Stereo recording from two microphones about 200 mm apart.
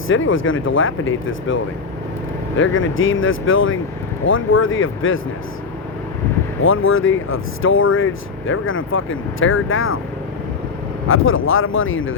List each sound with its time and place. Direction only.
0.1 s speech: 75° left (ahead or behind)
2.6 s speech: 75° left (ahead or behind)
6.6 s speech: 90° left
11.1 s speech: 90° left